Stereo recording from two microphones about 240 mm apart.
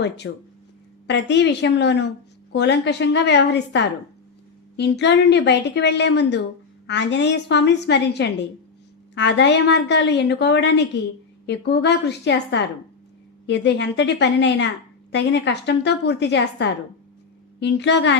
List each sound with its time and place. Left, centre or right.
0.2 s a woman's voice: left